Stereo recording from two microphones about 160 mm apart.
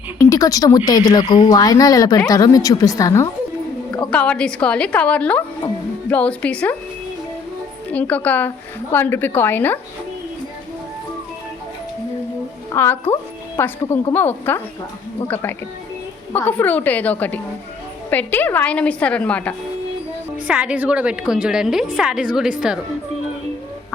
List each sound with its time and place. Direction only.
0.2 s speech: 20° left (ahead or behind)
4.1 s a woman's voice: 5° left (ahead or behind)
7.9 s a woman's voice: 10° left (ahead or behind)
12.7 s a woman's voice: 15° left (ahead or behind)
20.5 s a woman's voice: 5° right (ahead or behind)